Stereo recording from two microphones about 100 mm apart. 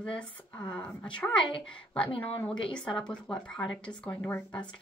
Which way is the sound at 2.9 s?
10° left (ahead or behind).